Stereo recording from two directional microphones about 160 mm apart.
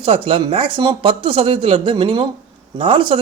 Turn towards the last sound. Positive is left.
turn(degrees=-35)  # may be behind; listen again after turning